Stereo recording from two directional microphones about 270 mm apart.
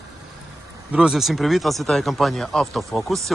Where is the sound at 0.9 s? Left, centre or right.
Centre.